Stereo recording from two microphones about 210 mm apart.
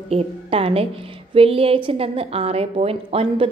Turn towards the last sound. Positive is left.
turn(degrees=-25)  # may be behind; listen again after turning